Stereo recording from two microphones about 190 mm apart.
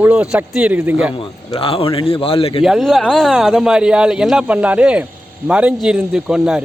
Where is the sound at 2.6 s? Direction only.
Centre (ahead or behind).